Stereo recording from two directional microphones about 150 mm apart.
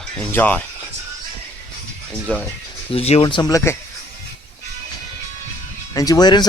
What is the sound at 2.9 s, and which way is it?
Speech, 40° left (ahead or behind).